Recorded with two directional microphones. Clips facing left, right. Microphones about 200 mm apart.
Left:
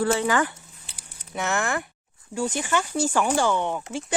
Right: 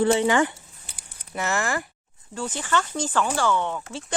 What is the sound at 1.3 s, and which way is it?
Speech, centre (ahead or behind).